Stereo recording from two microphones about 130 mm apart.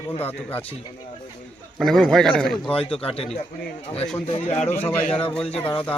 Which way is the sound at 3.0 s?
45° left (ahead or behind).